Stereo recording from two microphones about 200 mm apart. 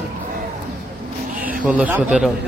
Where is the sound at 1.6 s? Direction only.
5° right (ahead or behind).